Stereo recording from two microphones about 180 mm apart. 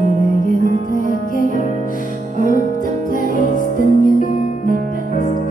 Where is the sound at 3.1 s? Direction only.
50° left (ahead or behind).